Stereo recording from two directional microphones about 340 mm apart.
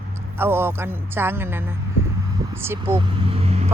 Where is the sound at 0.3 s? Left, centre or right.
Centre.